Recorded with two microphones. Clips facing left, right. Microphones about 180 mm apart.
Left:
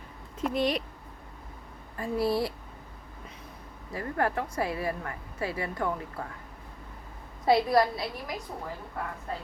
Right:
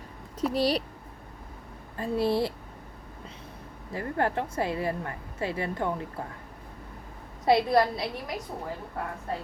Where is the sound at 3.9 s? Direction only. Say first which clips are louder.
Right 1 dB; 25° right (ahead or behind).